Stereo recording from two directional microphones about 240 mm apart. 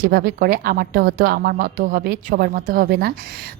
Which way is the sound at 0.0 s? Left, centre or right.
Right.